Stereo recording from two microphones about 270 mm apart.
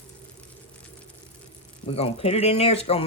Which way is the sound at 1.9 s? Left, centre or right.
Left.